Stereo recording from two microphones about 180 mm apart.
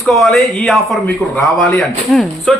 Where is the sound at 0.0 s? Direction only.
Centre (ahead or behind).